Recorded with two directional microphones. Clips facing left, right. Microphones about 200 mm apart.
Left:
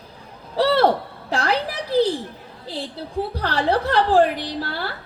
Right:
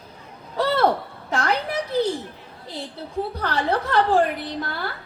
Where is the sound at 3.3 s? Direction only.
35° left (ahead or behind).